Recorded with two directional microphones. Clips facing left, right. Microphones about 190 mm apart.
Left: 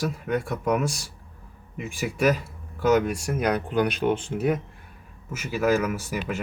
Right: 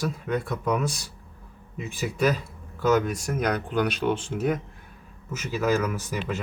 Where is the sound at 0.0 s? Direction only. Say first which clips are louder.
Left 1 dB; 10° left (ahead or behind).